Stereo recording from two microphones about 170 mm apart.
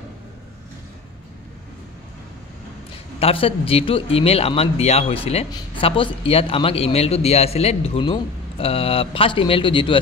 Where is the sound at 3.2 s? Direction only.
35° left (ahead or behind).